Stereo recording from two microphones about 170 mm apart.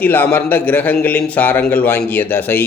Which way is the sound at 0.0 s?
10° left (ahead or behind).